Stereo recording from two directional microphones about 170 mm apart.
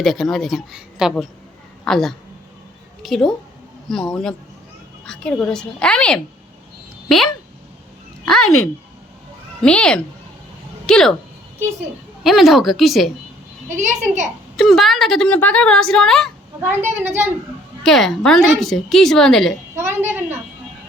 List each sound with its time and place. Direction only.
0.0 s a woman's voice: centre (ahead or behind)
8.2 s speech: 5° left (ahead or behind)
9.6 s a woman's voice: 5° left (ahead or behind)
12.2 s a woman's voice: centre (ahead or behind)
13.7 s a woman's voice: 45° right (ahead or behind)
14.5 s a woman's voice: centre (ahead or behind)
17.0 s a woman's voice: 15° right (ahead or behind)
17.8 s a woman's voice: centre (ahead or behind)
19.7 s a woman's voice: 15° right (ahead or behind)